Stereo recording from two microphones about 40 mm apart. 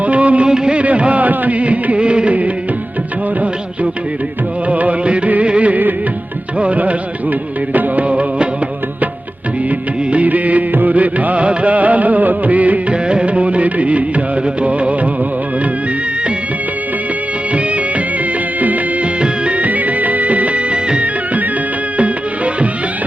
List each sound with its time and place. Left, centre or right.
0.0 s music: right
0.4 s music: right
0.8 s music of bollywood: right
4.7 s music: right
7.7 s music of bollywood: right
10.1 s music: right
12.9 s music: right
19.2 s music: right